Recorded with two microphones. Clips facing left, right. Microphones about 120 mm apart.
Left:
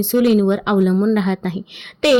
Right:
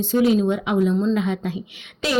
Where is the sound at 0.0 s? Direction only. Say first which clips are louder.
Left 4 dB; 75° left (ahead or behind).